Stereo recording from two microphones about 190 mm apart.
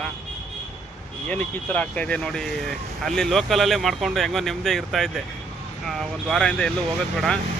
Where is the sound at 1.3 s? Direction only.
10° left (ahead or behind).